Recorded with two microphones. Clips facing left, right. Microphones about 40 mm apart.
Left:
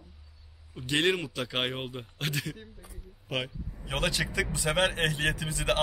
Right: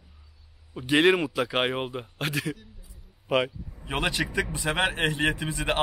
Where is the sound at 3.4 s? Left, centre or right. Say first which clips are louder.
Right 7 dB; centre.